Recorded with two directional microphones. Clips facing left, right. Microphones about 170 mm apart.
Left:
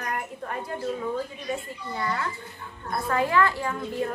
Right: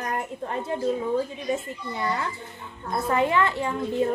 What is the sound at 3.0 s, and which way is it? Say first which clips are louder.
A child's voice: right 1 dB; 20° right (ahead or behind).